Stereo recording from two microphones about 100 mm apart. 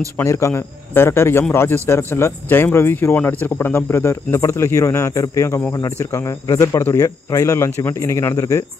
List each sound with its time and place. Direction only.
0.2 s speech: 30° left (ahead or behind)